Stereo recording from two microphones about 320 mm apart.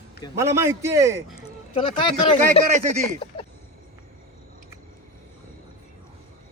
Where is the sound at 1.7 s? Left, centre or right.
Centre.